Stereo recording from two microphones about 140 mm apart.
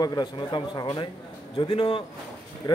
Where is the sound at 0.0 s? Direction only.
30° left (ahead or behind).